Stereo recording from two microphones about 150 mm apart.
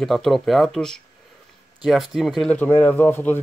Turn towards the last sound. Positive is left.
turn(degrees=15)  # may be behind; listen again after turning